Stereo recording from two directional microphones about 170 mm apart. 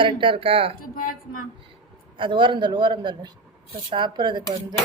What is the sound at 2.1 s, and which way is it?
Speech, 30° right (ahead or behind).